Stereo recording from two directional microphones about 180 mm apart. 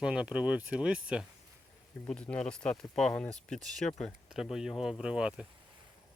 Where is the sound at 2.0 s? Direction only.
5° left (ahead or behind).